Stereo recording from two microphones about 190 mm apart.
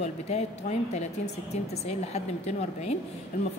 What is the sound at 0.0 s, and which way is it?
Speech, 35° left (ahead or behind).